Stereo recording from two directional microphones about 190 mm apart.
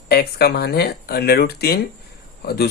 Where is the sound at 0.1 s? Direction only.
55° left (ahead or behind).